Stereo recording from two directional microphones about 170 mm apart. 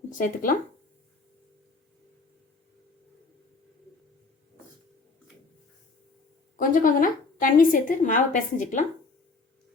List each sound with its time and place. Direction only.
0.1 s a woman's voice: 50° left (ahead or behind)
6.6 s a woman's voice: 50° left (ahead or behind)